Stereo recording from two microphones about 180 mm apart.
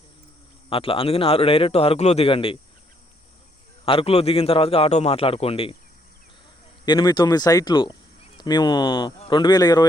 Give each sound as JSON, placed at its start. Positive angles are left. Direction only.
{"t": 0.7, "sound": "a man's voice", "side_deg": 30}
{"t": 3.8, "sound": "a man's voice", "side_deg": 30}
{"t": 6.8, "sound": "speech", "side_deg": 25}